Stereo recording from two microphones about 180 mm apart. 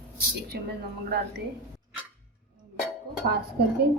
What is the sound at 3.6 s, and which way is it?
Speech, 65° right (ahead or behind).